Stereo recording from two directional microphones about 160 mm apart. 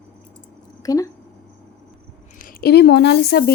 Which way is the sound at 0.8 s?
20° left (ahead or behind).